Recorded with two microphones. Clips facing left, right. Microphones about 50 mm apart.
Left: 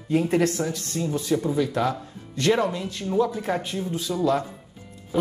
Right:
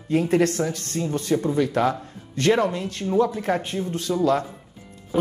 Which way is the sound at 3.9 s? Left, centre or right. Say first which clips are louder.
Right 3 dB; right.